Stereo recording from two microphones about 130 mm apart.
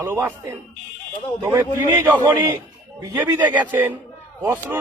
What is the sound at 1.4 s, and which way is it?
Speech, 30° right (ahead or behind).